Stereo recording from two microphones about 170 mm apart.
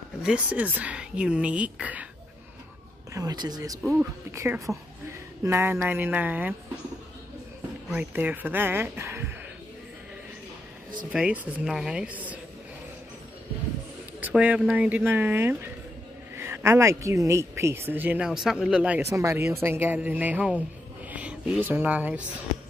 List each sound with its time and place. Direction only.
0.2 s speech: 5° right (ahead or behind)
3.1 s speech: 20° right (ahead or behind)
7.9 s speech: 10° right (ahead or behind)
11.1 s speech: 10° right (ahead or behind)
14.2 s speech: 10° right (ahead or behind)